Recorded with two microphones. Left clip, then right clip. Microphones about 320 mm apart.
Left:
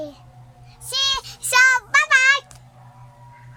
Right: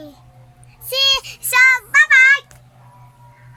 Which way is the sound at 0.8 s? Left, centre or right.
Centre.